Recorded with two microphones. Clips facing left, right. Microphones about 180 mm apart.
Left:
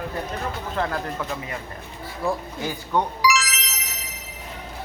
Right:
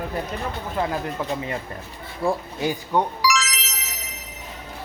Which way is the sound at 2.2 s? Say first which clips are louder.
Right 3 dB; 15° right (ahead or behind).